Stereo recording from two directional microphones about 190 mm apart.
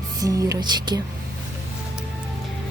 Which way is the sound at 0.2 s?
15° right (ahead or behind).